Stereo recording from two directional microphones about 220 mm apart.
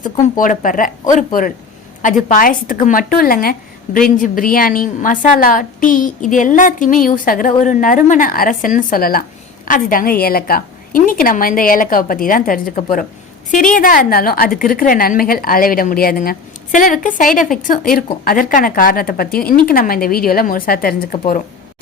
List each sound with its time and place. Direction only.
0.0 s a woman's voice: 40° left (ahead or behind)